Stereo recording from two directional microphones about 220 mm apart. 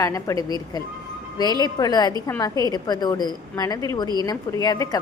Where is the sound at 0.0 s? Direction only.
15° left (ahead or behind).